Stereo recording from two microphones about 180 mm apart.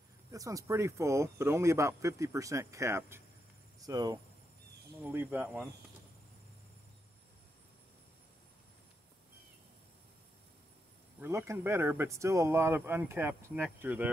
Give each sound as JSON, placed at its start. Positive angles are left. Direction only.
{"t": 0.3, "sound": "speech", "side_deg": -20}
{"t": 3.8, "sound": "cricket", "side_deg": -20}
{"t": 5.0, "sound": "speech", "side_deg": -10}
{"t": 11.1, "sound": "speech", "side_deg": -15}